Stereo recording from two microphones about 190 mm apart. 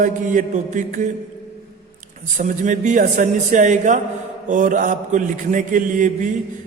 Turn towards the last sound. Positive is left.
turn(degrees=-40)  # may be behind; listen again after turning